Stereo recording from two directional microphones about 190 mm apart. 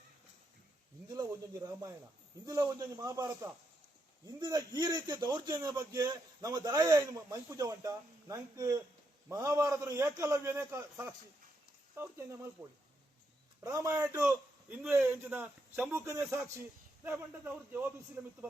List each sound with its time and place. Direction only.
1.0 s a man's voice: 20° right (ahead or behind)
13.7 s a man's voice: 15° right (ahead or behind)